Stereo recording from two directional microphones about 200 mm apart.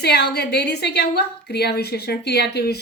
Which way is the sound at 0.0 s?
55° left (ahead or behind).